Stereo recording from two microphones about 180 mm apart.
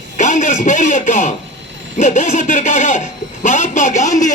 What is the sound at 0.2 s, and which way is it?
A man's voice, 40° left (ahead or behind).